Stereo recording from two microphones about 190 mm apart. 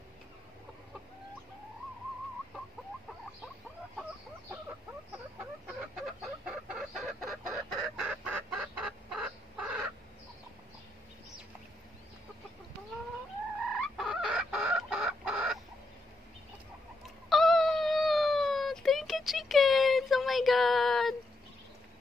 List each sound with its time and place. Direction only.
5.9 s chicken: centre (ahead or behind)
13.7 s chicken: centre (ahead or behind)
17.0 s dog: centre (ahead or behind)